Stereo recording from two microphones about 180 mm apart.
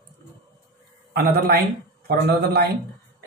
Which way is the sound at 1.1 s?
60° right (ahead or behind).